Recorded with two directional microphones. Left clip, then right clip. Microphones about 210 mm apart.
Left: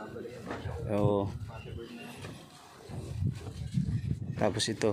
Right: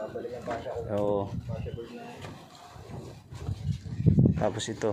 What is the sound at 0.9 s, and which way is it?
Speech, 30° left (ahead or behind).